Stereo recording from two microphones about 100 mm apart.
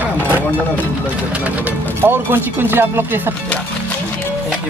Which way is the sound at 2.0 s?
20° right (ahead or behind).